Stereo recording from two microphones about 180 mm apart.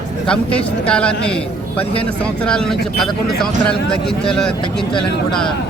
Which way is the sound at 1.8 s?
30° left (ahead or behind).